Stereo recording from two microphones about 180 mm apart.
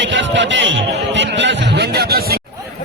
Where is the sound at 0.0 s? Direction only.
90° right; by 2.4 s 60° right (ahead or behind).